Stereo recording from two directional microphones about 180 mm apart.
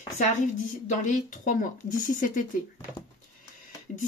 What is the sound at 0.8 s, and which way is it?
Speech, 45° left (ahead or behind).